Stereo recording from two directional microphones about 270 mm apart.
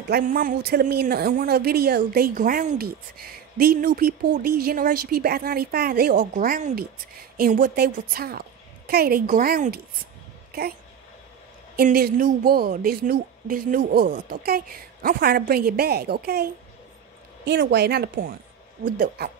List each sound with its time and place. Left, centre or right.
0.1 s a woman's voice: right
11.7 s a woman's voice: right
17.5 s a woman's voice: right